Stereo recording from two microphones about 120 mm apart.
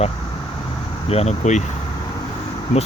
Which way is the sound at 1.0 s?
60° left (ahead or behind).